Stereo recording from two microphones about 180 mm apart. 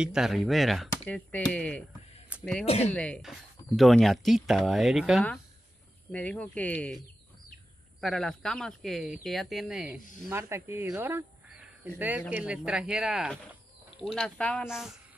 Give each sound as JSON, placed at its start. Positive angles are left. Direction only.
{"t": 0.0, "sound": "speech", "side_deg": -5}
{"t": 2.6, "sound": "speech", "side_deg": 35}
{"t": 2.9, "sound": "speech", "side_deg": 5}
{"t": 8.0, "sound": "speech", "side_deg": 0}